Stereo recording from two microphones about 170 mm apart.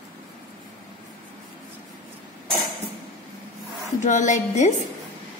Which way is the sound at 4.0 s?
45° left (ahead or behind).